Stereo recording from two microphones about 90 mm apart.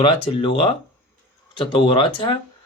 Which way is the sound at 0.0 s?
80° left.